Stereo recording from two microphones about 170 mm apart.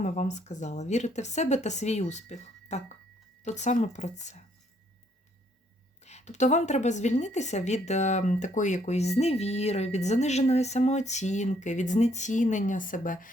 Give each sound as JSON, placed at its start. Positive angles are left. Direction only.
{"t": 0.0, "sound": "a woman's voice", "side_deg": 45}
{"t": 6.0, "sound": "a woman's voice", "side_deg": 40}